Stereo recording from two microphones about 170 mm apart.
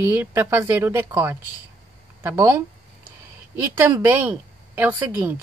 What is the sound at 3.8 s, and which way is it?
Speech, 15° right (ahead or behind).